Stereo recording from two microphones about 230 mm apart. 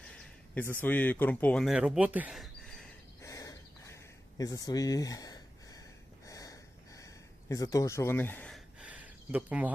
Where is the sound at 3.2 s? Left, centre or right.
Centre.